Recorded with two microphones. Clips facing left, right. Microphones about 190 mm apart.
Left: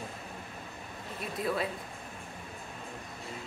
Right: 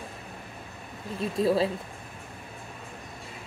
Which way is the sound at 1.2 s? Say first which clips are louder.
Right 8 dB; 30° right (ahead or behind).